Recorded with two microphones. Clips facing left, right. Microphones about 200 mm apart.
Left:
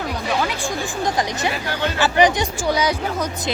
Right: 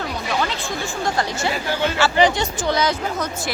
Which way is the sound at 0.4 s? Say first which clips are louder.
Left 2 dB; 15° left (ahead or behind).